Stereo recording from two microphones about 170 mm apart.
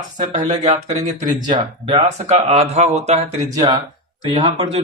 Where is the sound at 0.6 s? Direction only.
40° right (ahead or behind).